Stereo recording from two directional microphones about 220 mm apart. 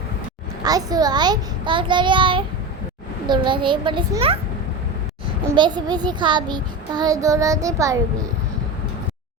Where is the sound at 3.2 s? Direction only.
20° right (ahead or behind).